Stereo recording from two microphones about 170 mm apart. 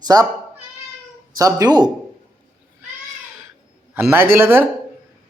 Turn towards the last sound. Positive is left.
turn(degrees=-15)  # may be behind; listen again after turning